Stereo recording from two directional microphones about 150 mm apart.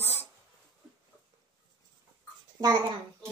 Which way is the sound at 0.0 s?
15° left (ahead or behind).